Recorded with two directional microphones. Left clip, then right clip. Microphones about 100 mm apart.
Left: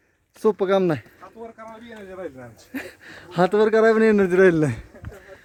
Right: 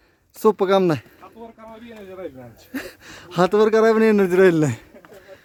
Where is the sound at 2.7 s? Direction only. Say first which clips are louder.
Right 2 dB; 30° right (ahead or behind); by 4.8 s 10° right (ahead or behind).